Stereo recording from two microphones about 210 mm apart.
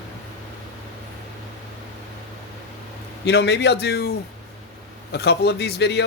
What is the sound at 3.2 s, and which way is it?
Speech, 55° left (ahead or behind).